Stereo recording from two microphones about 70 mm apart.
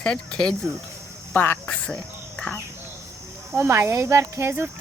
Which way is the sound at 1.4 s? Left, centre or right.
Left.